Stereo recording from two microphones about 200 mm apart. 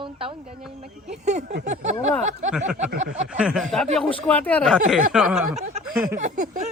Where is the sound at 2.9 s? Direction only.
50° right (ahead or behind).